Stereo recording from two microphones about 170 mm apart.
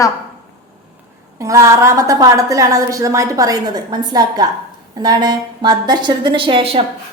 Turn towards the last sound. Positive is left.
turn(degrees=-30)  # may be behind; listen again after turning